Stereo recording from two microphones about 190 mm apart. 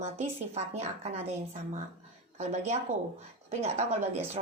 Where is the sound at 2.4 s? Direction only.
35° right (ahead or behind).